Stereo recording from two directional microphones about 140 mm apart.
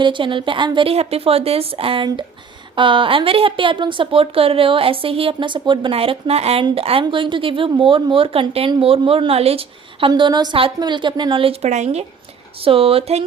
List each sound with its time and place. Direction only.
0.0 s speech: 35° right (ahead or behind)
10.1 s speech: 30° right (ahead or behind); by 12.0 s 55° right (ahead or behind)
12.5 s speech: 40° right (ahead or behind)